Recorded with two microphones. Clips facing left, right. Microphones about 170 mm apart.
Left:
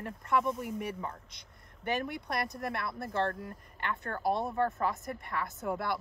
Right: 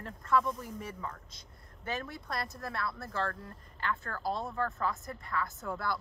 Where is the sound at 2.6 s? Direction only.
20° left (ahead or behind).